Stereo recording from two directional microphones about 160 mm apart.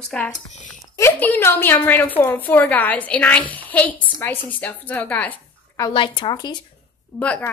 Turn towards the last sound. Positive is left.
turn(degrees=10)  # may be behind; listen again after turning